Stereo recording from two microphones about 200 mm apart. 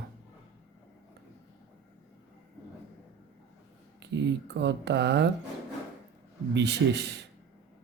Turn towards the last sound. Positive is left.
turn(degrees=-60)  # may be behind; listen again after turning